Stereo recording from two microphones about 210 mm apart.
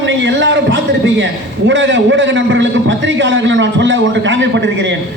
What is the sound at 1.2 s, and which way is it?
A man's voice, 60° right (ahead or behind).